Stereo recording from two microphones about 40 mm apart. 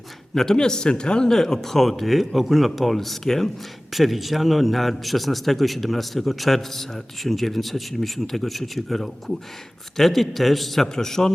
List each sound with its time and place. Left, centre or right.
0.3 s a man's voice: centre